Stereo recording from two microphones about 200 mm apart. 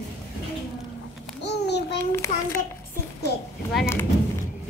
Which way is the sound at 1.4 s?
55° left (ahead or behind).